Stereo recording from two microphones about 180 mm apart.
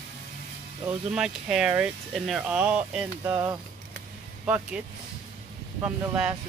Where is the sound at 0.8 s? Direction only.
5° right (ahead or behind).